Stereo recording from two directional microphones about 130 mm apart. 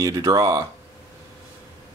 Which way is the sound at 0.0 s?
25° right (ahead or behind).